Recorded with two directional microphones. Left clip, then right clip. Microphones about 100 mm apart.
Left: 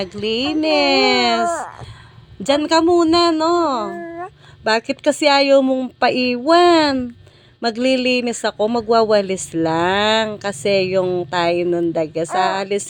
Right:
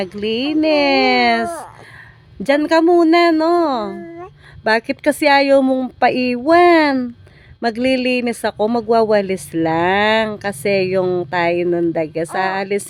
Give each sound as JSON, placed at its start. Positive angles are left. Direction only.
{"t": 0.0, "sound": "speech", "side_deg": -40}
{"t": 11.3, "sound": "speech", "side_deg": -35}